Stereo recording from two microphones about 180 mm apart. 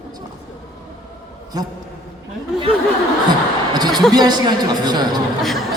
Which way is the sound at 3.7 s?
25° right (ahead or behind).